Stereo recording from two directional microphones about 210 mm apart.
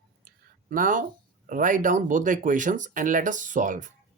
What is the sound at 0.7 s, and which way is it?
Speech, 40° right (ahead or behind).